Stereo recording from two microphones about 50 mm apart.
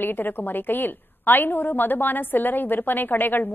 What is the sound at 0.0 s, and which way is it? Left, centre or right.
A woman's voice, left.